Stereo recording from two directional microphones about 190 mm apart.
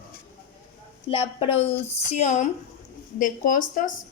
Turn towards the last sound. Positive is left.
turn(degrees=45)  # may be behind; listen again after turning